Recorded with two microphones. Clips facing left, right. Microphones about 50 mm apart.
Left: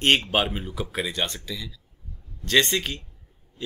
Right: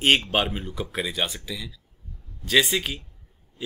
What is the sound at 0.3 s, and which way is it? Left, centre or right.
Speech, centre.